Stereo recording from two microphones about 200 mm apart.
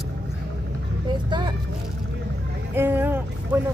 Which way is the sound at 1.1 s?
25° right (ahead or behind).